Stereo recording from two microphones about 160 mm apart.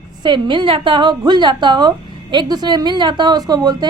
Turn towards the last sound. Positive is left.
turn(degrees=-25)  # may be behind; listen again after turning